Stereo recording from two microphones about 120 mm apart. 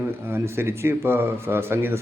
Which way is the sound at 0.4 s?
20° right (ahead or behind).